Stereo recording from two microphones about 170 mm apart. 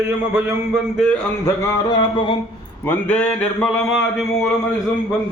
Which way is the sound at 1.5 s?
15° left (ahead or behind).